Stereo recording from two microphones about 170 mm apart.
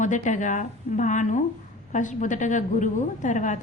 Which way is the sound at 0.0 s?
45° left (ahead or behind).